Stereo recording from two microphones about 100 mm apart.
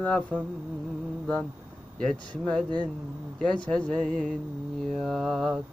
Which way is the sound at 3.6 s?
10° left (ahead or behind).